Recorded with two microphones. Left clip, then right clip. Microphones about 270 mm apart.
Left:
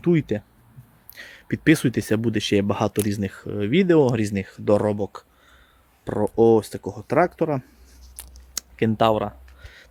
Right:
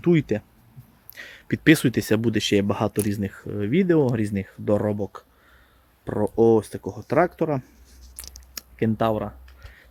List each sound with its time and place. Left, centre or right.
0.0 s speech: centre
8.8 s speech: left